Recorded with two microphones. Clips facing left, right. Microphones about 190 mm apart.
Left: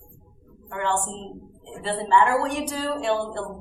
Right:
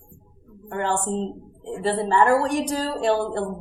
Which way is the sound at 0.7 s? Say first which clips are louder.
Right 3 dB; 40° right (ahead or behind).